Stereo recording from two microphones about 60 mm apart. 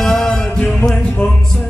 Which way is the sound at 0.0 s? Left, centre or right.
Centre.